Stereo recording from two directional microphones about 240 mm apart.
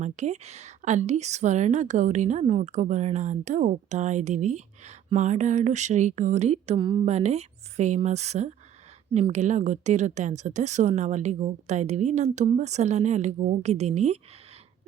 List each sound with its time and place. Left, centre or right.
0.0 s a woman's voice: right